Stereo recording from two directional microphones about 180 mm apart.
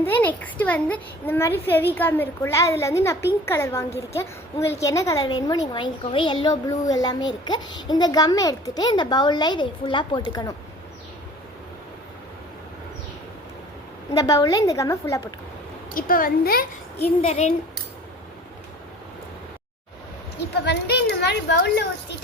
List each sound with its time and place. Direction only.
0.0 s a child's voice: 10° left (ahead or behind)
14.1 s a woman's voice: 20° left (ahead or behind)
16.0 s a woman's voice: 50° left (ahead or behind)
17.2 s speech: 40° left (ahead or behind)
20.4 s speech: 65° left (ahead or behind)